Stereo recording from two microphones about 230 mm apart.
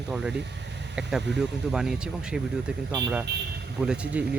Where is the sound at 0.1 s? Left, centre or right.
Centre.